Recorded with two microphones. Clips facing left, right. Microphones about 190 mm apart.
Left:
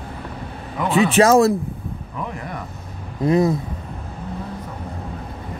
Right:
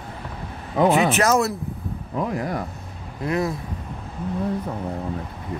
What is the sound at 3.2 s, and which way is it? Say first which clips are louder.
Speech: left 7 dB; 20° left (ahead or behind).